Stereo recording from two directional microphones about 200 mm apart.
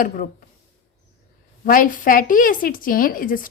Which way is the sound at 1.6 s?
45° left (ahead or behind).